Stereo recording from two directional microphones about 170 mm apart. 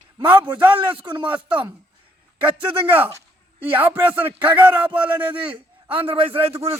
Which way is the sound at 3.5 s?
10° right (ahead or behind).